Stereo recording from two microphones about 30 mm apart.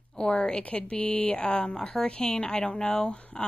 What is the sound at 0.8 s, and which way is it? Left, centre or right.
Speech, left.